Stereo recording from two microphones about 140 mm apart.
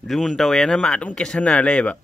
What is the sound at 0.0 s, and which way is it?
Speech, centre (ahead or behind).